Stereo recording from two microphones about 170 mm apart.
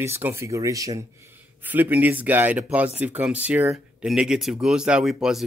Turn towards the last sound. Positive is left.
turn(degrees=0)  # may be behind; listen again after turning